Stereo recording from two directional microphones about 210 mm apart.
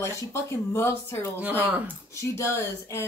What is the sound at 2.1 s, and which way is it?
Speech, 15° left (ahead or behind).